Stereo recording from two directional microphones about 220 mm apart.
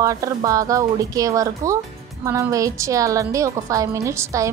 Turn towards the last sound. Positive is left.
turn(degrees=-15)  # may be behind; listen again after turning